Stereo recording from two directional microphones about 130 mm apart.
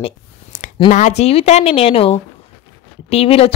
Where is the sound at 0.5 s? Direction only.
85° left.